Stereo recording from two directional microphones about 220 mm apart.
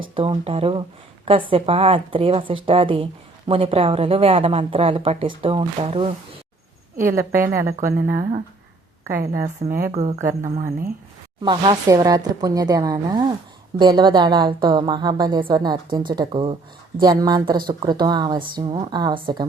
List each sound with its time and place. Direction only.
0.0 s speech: 25° right (ahead or behind)
6.9 s a woman's voice: 10° right (ahead or behind)
9.6 s speech: 40° right (ahead or behind)
11.4 s a woman's voice: 20° right (ahead or behind)